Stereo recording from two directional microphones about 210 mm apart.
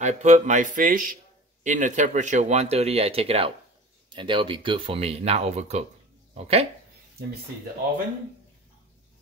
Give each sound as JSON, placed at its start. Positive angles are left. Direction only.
{"t": 0.0, "sound": "speech", "side_deg": -35}